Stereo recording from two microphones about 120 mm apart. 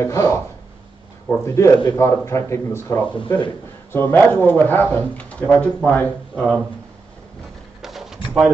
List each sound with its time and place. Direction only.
0.0 s speech: 25° left (ahead or behind); by 6.5 s 5° left (ahead or behind)
7.8 s pigeon: centre (ahead or behind)